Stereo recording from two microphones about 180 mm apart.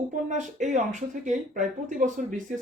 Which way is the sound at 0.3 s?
45° right (ahead or behind).